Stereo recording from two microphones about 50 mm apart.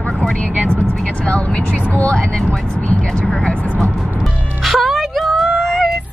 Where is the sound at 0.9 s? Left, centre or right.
Centre.